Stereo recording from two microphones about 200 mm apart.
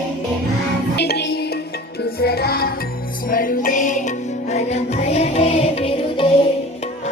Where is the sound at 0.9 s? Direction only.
55° left (ahead or behind); by 6.3 s 25° left (ahead or behind).